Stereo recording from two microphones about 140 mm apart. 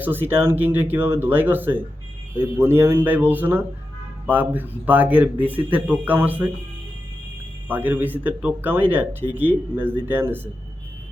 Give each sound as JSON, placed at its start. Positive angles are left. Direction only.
{"t": 0.0, "sound": "speech", "side_deg": -15}
{"t": 7.7, "sound": "speech", "side_deg": -10}